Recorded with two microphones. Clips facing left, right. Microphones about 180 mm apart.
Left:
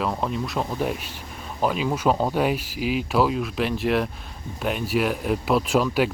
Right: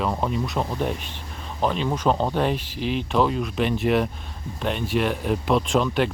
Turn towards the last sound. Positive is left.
turn(degrees=5)  # may be behind; listen again after turning